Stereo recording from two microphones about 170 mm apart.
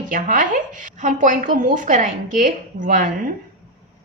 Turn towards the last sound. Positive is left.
turn(degrees=-50)  # may be behind; listen again after turning